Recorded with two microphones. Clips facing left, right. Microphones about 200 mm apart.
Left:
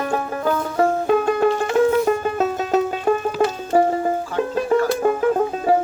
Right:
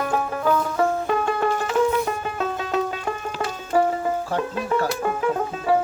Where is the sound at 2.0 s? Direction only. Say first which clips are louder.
Left 7 dB; 40° left (ahead or behind).